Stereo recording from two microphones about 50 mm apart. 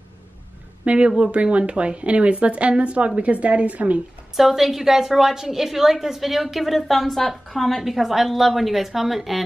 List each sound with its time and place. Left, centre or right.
0.8 s speech: centre
4.4 s a woman's voice: centre